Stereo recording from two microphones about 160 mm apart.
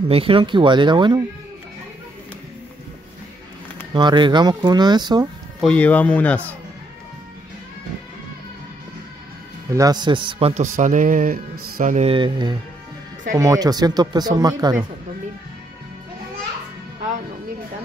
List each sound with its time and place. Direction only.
0.1 s speech: 35° right (ahead or behind)
3.9 s speech: 30° right (ahead or behind)
5.6 s speech: 10° left (ahead or behind)
9.7 s speech: 20° right (ahead or behind)
10.5 s speech: 50° right (ahead or behind)
12.0 s speech: 30° right (ahead or behind)